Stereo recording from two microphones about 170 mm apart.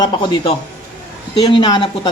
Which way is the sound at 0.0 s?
30° left (ahead or behind).